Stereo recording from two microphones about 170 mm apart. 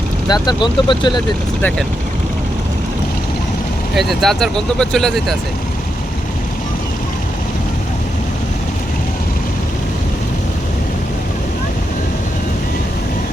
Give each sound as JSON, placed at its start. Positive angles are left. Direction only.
{"t": 0.3, "sound": "speech", "side_deg": 25}
{"t": 3.9, "sound": "speech", "side_deg": 0}